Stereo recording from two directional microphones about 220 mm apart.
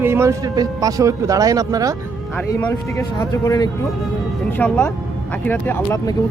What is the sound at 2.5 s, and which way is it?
Speech, 15° left (ahead or behind).